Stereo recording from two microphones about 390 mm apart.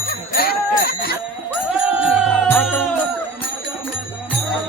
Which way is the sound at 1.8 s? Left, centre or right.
Centre.